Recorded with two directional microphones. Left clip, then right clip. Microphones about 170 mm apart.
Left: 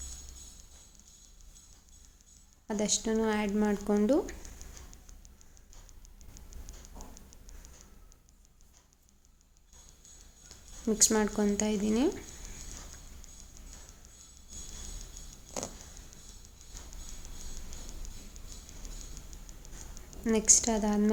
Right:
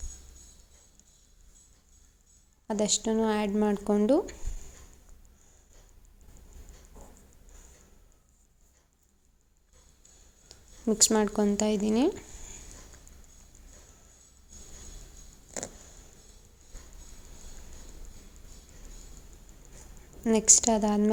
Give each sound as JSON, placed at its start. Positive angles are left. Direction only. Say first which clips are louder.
{"t": 2.6, "sound": "speech", "louder": "right 3 dB", "side_deg": -30}
{"t": 10.8, "sound": "speech", "louder": "right 3 dB", "side_deg": -30}
{"t": 15.6, "sound": "a sound", "louder": "even", "side_deg": -30}
{"t": 20.2, "sound": "speech", "louder": "right 3 dB", "side_deg": -30}